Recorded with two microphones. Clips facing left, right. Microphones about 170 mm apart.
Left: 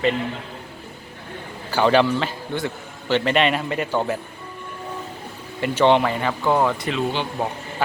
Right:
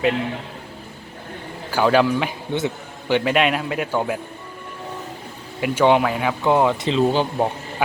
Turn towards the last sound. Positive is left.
turn(degrees=-40)  # may be behind; listen again after turning